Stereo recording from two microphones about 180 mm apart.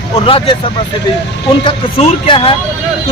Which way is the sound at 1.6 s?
30° left (ahead or behind).